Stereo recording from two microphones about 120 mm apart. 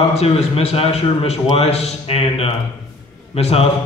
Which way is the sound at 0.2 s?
55° left (ahead or behind).